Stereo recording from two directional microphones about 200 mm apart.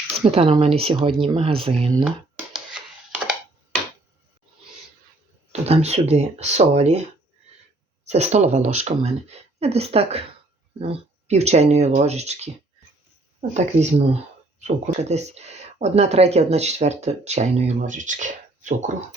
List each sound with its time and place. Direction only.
0.2 s speech: 30° right (ahead or behind)
2.0 s a sound: 5° right (ahead or behind)
5.5 s speech: 30° right (ahead or behind)
8.0 s speech: 35° right (ahead or behind)
13.5 s speech: 35° right (ahead or behind)